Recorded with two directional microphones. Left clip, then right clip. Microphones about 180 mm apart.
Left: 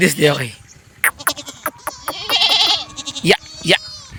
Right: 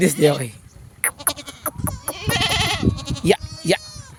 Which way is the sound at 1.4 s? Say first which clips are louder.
Left 3 dB; 50° left (ahead or behind).